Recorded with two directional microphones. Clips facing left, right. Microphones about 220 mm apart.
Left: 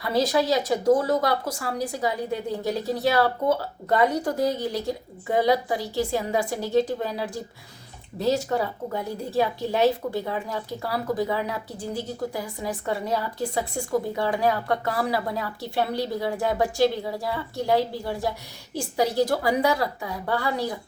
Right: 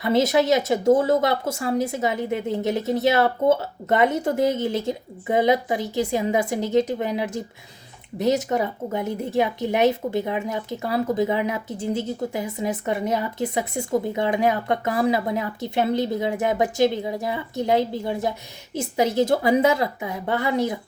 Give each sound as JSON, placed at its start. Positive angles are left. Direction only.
{"t": 0.0, "sound": "a woman's voice", "side_deg": -20}